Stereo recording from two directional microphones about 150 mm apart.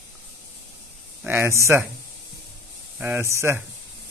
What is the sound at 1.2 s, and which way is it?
Speech, 15° right (ahead or behind).